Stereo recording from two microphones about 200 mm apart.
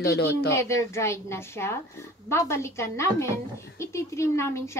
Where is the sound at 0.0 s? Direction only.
55° left (ahead or behind).